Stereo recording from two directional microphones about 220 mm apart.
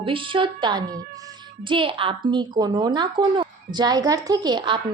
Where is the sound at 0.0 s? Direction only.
25° right (ahead or behind).